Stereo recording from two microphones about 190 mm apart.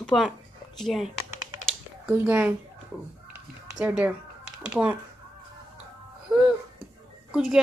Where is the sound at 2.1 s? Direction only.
10° right (ahead or behind).